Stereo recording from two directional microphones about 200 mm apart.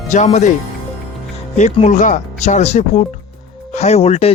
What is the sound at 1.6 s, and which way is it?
Speech, 35° left (ahead or behind).